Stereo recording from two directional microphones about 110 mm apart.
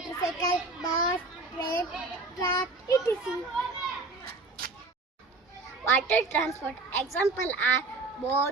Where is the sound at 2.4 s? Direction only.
30° left (ahead or behind).